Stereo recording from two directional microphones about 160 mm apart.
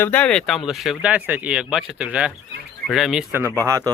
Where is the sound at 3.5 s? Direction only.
20° right (ahead or behind).